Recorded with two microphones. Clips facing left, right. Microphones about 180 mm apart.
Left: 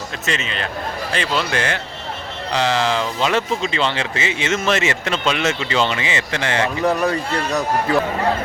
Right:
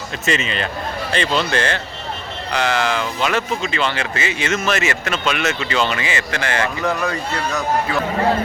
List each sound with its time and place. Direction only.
0.3 s a man's voice: centre (ahead or behind)
2.5 s speech: 25° left (ahead or behind)